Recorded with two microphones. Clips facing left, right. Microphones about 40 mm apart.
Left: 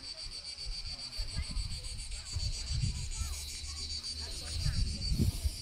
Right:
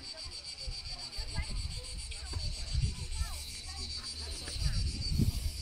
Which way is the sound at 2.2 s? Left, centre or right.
Centre.